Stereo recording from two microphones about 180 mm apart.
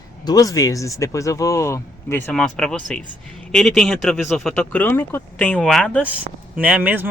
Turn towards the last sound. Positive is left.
turn(degrees=-10)  # may be behind; listen again after turning